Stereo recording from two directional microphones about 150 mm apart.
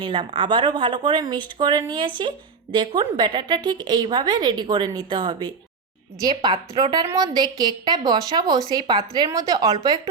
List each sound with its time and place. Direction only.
0.0 s a woman's voice: 35° right (ahead or behind)